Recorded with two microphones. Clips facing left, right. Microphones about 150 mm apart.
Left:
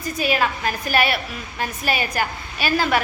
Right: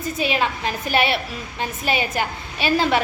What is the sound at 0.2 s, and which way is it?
A woman's voice, 20° right (ahead or behind).